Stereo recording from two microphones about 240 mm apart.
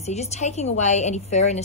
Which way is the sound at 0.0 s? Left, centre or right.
Left.